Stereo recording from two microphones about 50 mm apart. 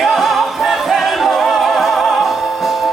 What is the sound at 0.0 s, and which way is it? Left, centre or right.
Music, centre.